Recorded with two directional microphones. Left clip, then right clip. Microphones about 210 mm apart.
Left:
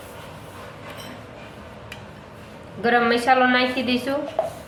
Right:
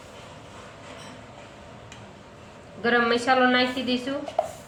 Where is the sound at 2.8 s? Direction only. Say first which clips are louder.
Left 3 dB; 10° left (ahead or behind).